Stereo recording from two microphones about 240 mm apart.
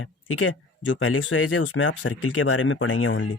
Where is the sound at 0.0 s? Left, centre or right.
Left.